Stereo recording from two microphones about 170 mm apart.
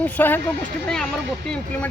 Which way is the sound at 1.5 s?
10° left (ahead or behind).